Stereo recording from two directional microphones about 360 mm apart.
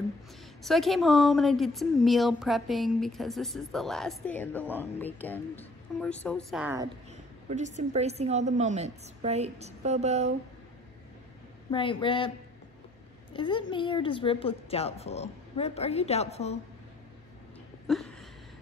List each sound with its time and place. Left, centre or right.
0.7 s speech: centre
7.4 s a woman's voice: centre
11.7 s a woman's voice: centre
13.3 s a woman's voice: centre
17.8 s a sound: centre